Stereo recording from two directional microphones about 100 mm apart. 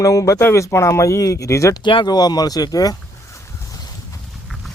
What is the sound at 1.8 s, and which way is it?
Vehicle, 55° left (ahead or behind).